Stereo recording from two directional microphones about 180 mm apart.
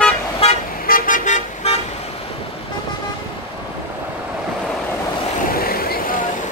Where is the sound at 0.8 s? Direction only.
50° left (ahead or behind).